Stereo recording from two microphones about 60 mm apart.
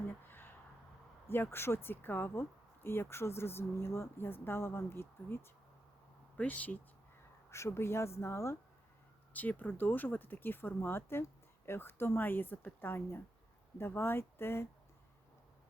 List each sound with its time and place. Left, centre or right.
0.3 s a sound: left
1.3 s speech: left
6.3 s speech: left
7.5 s speech: left
9.3 s speech: left